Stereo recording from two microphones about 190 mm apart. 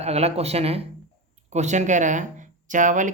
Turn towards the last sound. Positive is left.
turn(degrees=-40)  # may be behind; listen again after turning